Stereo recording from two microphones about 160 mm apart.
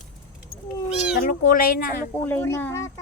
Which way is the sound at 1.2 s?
60° left (ahead or behind).